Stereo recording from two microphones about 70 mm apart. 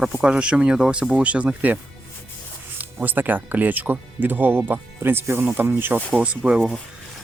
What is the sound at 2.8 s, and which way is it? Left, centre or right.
Speech, right.